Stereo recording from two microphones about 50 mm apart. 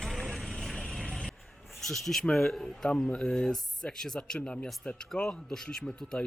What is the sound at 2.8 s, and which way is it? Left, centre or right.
Speech, left.